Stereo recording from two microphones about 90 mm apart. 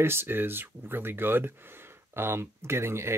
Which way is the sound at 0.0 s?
25° right (ahead or behind).